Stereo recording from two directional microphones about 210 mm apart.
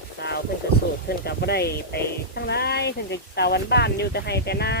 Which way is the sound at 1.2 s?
50° left (ahead or behind).